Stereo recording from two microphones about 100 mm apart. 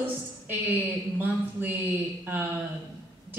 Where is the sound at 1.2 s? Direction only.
20° right (ahead or behind).